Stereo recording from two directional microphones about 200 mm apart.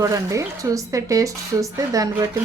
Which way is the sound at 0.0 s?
15° right (ahead or behind).